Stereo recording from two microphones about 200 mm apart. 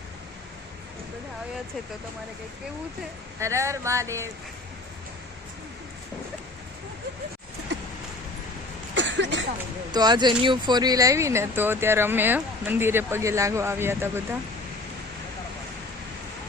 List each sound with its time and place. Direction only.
3.4 s speech: 15° right (ahead or behind)
9.0 s a sound: 65° right (ahead or behind)
9.9 s speech: 20° right (ahead or behind)